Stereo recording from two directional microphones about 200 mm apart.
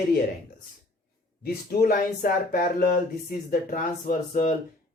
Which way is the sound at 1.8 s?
50° left (ahead or behind).